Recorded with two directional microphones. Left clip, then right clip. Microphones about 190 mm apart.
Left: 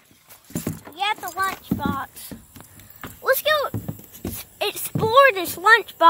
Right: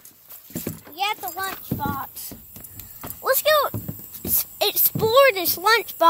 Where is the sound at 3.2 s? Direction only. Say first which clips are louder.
Even; centre (ahead or behind).